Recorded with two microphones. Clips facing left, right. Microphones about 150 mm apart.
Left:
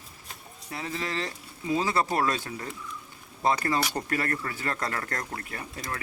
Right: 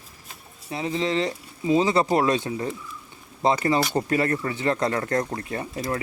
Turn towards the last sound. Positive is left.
turn(degrees=-20)  # may be behind; listen again after turning